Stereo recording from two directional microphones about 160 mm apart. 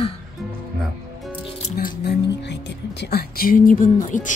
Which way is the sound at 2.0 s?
90° left.